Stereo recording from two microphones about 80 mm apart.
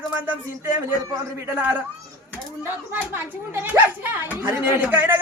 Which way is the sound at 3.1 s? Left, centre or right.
Right.